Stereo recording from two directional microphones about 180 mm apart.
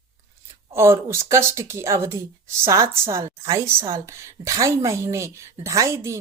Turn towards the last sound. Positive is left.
turn(degrees=-15)  # may be behind; listen again after turning